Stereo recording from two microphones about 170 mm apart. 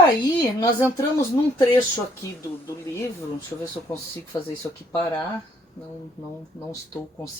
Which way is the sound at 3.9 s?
15° left (ahead or behind).